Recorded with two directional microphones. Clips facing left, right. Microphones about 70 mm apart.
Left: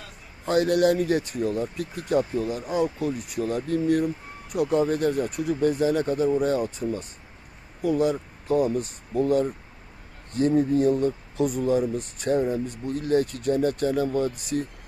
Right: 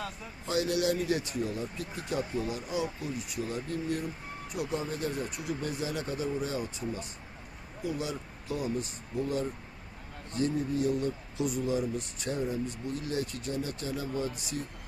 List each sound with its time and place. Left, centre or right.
0.4 s speech: left